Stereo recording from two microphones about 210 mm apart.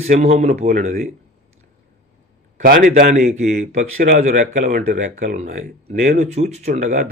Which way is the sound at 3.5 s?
50° right (ahead or behind).